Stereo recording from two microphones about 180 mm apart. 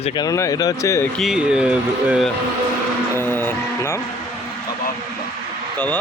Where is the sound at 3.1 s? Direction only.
10° left (ahead or behind).